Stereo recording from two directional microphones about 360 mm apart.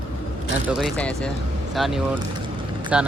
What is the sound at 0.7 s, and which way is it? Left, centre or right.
Speech, centre.